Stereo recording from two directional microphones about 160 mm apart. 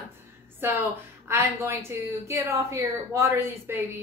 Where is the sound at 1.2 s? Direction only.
15° right (ahead or behind).